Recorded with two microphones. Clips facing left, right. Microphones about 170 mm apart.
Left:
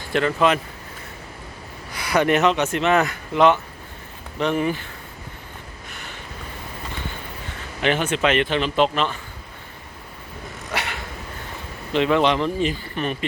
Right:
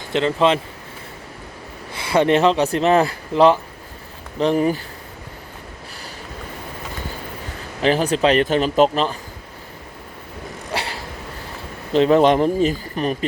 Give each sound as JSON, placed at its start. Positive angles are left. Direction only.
{"t": 0.1, "sound": "speech", "side_deg": -25}
{"t": 1.9, "sound": "speech", "side_deg": -25}
{"t": 7.8, "sound": "speech", "side_deg": -35}
{"t": 10.7, "sound": "a sound", "side_deg": -30}
{"t": 11.9, "sound": "speech", "side_deg": -40}